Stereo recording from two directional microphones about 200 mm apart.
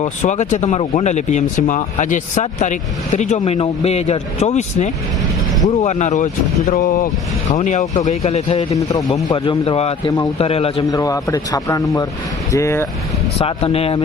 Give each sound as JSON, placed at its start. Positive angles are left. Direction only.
{"t": 0.0, "sound": "speech", "side_deg": 35}
{"t": 9.0, "sound": "speech", "side_deg": 20}
{"t": 10.9, "sound": "speech", "side_deg": 15}
{"t": 13.4, "sound": "speech", "side_deg": 30}